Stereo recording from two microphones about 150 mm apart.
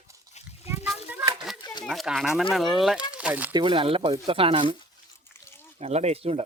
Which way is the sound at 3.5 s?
30° right (ahead or behind).